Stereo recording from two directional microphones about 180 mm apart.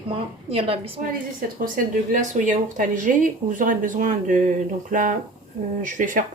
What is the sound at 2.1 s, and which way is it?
Speech, 45° right (ahead or behind).